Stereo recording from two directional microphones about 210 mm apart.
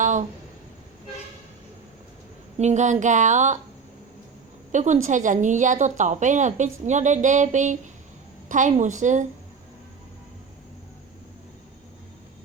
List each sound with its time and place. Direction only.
0.0 s a sound: 35° right (ahead or behind)
2.6 s a woman's voice: 35° right (ahead or behind)
4.7 s a woman's voice: 35° right (ahead or behind)